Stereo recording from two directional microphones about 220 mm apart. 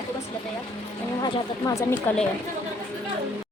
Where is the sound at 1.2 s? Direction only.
15° left (ahead or behind).